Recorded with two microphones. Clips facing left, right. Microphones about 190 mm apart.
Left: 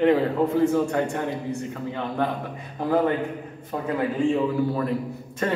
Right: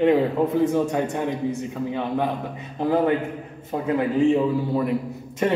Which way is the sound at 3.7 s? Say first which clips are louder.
Right 2 dB; 25° right (ahead or behind).